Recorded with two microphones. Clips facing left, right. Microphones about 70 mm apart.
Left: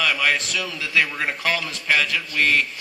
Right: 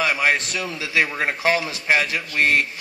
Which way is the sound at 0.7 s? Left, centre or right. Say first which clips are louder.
Right 1 dB; right.